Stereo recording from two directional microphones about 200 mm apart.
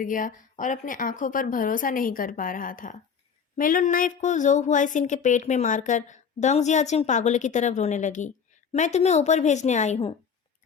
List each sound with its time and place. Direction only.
0.0 s a woman's voice: 40° left (ahead or behind)